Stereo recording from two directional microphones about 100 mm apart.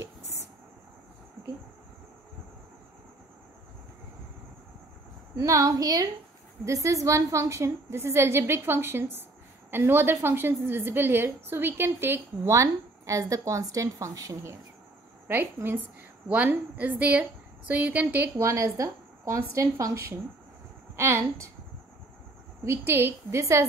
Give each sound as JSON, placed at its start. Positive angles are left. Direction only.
{"t": 5.4, "sound": "a woman's voice", "side_deg": -35}
{"t": 15.2, "sound": "a woman's voice", "side_deg": -20}
{"t": 22.7, "sound": "a woman's voice", "side_deg": -25}